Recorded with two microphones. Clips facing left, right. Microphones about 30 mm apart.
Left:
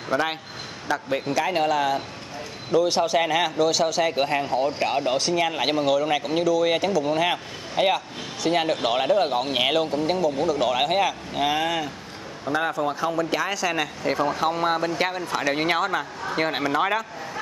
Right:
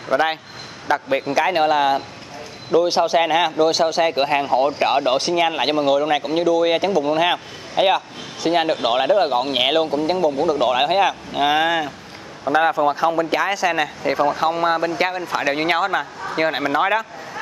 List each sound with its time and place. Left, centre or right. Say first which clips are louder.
0.1 s speech: right 6 dB; centre
4.8 s speech: right 5 dB; right; by 17.0 s centre